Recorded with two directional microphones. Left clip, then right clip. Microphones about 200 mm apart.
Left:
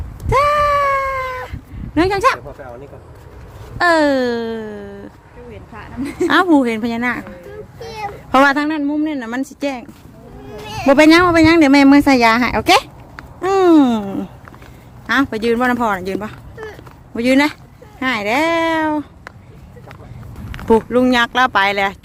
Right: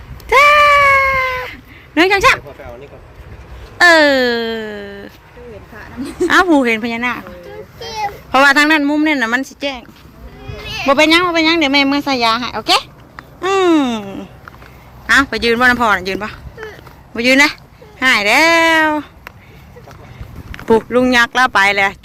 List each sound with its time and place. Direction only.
0.3 s a sound: centre (ahead or behind)
2.0 s speech: centre (ahead or behind)
3.8 s speech: 5° left (ahead or behind)
6.2 s speech: 10° left (ahead or behind)
7.8 s a sound: 15° left (ahead or behind)
8.5 s speech: 5° right (ahead or behind)
8.8 s speech: 20° right (ahead or behind)
9.3 s speech: 10° left (ahead or behind)
10.5 s a sound: 45° left (ahead or behind)
10.8 s speech: 30° left (ahead or behind)
13.4 s speech: 20° left (ahead or behind)
15.0 s speech: 15° left (ahead or behind)
20.5 s speech: 10° left (ahead or behind)